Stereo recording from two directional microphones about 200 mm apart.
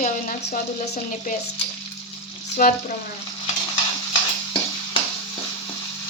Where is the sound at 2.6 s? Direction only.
45° left (ahead or behind).